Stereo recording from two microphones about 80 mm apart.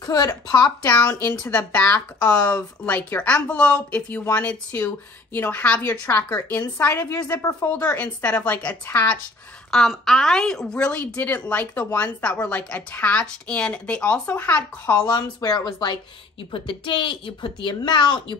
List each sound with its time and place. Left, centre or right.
0.0 s a woman's voice: left
1.4 s a woman's voice: centre
8.0 s a woman's voice: centre
9.7 s a woman's voice: centre
15.0 s a woman's voice: left
16.6 s a woman's voice: left